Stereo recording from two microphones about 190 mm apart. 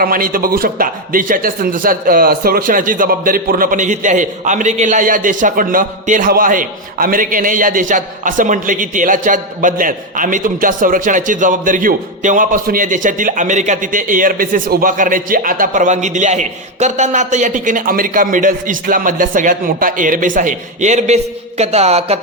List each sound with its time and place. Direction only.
0.0 s a man's voice: 50° right (ahead or behind)
21.6 s music: 35° right (ahead or behind)